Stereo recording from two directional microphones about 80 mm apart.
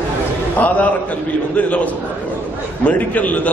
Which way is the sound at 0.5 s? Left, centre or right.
Centre.